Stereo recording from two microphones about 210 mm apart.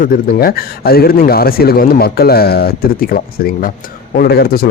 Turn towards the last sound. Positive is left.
turn(degrees=50)  # may be behind; listen again after turning